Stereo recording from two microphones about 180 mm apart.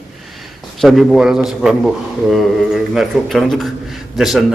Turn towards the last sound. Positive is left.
turn(degrees=0)  # may be behind; listen again after turning